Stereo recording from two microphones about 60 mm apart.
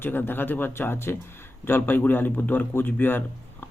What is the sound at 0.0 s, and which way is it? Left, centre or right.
A man's voice, left.